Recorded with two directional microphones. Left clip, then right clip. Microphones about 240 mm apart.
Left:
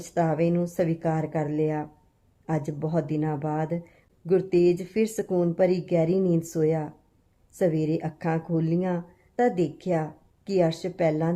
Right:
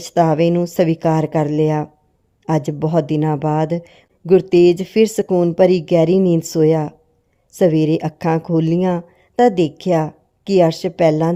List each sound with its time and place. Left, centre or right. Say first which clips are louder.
0.1 s speech: right 10 dB; right